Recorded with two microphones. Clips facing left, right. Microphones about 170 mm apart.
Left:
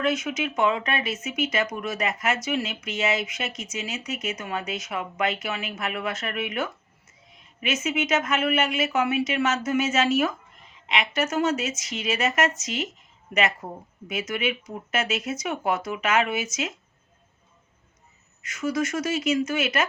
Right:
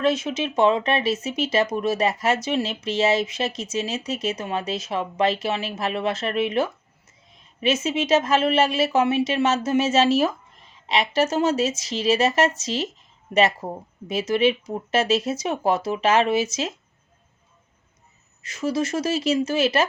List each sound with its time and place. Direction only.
0.0 s speech: 30° right (ahead or behind)
18.4 s speech: 30° right (ahead or behind)